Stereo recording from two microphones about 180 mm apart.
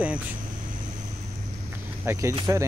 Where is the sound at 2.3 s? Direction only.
20° right (ahead or behind).